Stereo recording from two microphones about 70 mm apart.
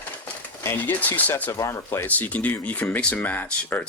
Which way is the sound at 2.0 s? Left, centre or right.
Left.